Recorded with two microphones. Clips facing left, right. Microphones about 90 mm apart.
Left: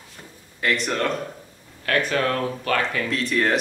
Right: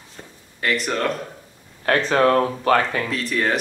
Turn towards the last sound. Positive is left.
turn(degrees=0)  # may be behind; listen again after turning